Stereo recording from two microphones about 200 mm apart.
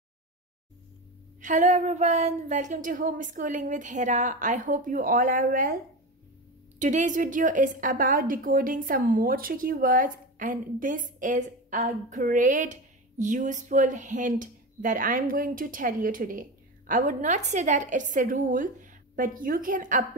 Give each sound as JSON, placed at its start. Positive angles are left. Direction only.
{"t": 1.4, "sound": "a woman's voice", "side_deg": -40}
{"t": 6.8, "sound": "a woman's voice", "side_deg": -35}